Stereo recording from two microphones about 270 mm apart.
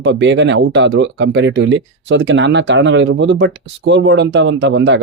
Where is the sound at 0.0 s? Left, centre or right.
Right.